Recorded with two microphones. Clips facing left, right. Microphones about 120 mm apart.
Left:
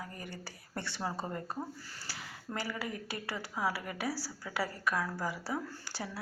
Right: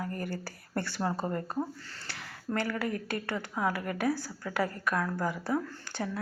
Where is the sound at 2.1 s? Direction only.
5° left (ahead or behind).